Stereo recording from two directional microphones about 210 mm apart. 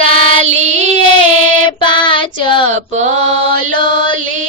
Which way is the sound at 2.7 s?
35° right (ahead or behind).